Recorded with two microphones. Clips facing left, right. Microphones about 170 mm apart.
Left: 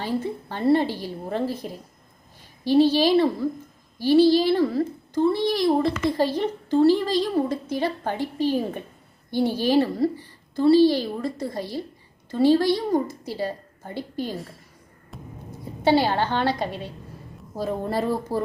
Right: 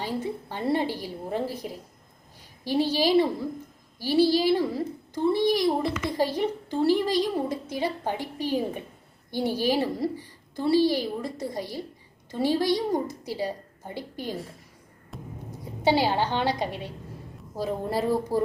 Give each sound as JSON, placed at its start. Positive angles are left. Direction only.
{"t": 0.0, "sound": "a woman's voice", "side_deg": -15}
{"t": 15.1, "sound": "music", "side_deg": 0}
{"t": 15.8, "sound": "a woman's voice", "side_deg": -15}